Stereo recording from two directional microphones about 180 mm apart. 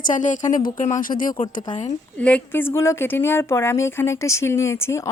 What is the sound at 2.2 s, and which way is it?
Speech, 5° left (ahead or behind).